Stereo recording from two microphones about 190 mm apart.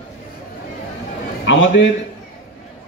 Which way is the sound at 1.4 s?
75° left (ahead or behind).